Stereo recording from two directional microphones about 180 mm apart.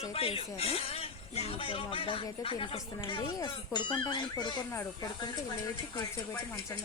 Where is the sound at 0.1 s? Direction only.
30° left (ahead or behind).